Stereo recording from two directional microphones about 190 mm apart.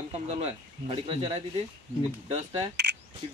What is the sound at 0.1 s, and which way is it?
Speech, 30° right (ahead or behind).